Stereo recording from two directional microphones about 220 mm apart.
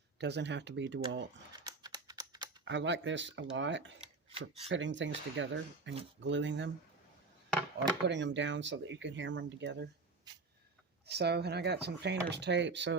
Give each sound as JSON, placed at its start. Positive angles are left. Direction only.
{"t": 0.2, "sound": "speech", "side_deg": -50}
{"t": 1.5, "sound": "typing", "side_deg": -20}
{"t": 2.6, "sound": "speech", "side_deg": -55}
{"t": 4.3, "sound": "speech", "side_deg": -25}
{"t": 4.7, "sound": "speech", "side_deg": -55}
{"t": 8.0, "sound": "speech", "side_deg": -55}
{"t": 10.3, "sound": "a sound", "side_deg": -20}
{"t": 11.0, "sound": "speech", "side_deg": -50}